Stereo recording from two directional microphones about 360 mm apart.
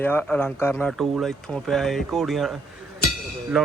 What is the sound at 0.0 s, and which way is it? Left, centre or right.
Speech, centre.